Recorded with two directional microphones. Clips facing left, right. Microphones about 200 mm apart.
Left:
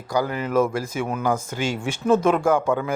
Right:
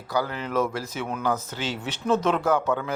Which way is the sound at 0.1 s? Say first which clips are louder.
Left 4 dB; 15° left (ahead or behind).